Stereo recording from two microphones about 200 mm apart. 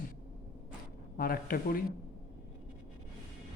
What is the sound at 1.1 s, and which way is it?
Speech, 45° left (ahead or behind).